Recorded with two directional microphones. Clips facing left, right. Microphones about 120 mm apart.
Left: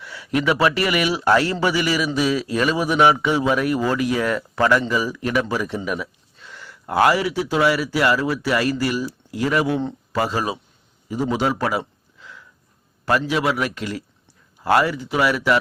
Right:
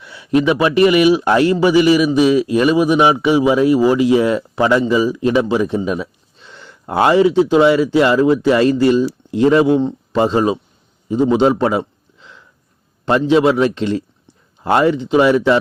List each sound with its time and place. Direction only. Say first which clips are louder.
0.0 s speech: right 7 dB; 20° right (ahead or behind)
11.1 s a sound: right 8 dB; 25° right (ahead or behind)
13.1 s a man's voice: right 8 dB; 25° right (ahead or behind)